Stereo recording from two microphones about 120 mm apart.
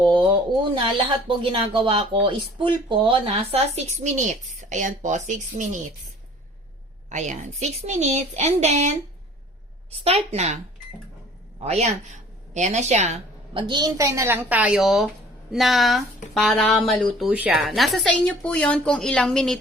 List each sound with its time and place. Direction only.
0.0 s speech: 40° right (ahead or behind)
3.8 s a woman's voice: 80° right
7.1 s a woman's voice: 85° right; by 8.9 s 65° right (ahead or behind)
10.0 s speech: 60° right (ahead or behind)
11.6 s a woman's voice: 65° right (ahead or behind)
13.5 s a woman's voice: 45° right (ahead or behind); by 17.2 s 5° left (ahead or behind)
17.2 s speech: 10° right (ahead or behind)
17.6 s a woman's voice: centre (ahead or behind)